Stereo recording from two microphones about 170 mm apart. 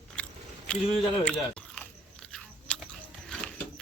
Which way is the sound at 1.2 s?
5° left (ahead or behind).